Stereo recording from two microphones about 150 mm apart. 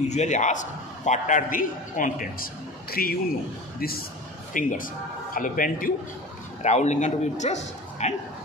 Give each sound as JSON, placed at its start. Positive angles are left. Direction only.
{"t": 0.1, "sound": "a man's voice", "side_deg": 50}
{"t": 4.6, "sound": "a man's voice", "side_deg": 65}
{"t": 6.6, "sound": "a man's voice", "side_deg": 50}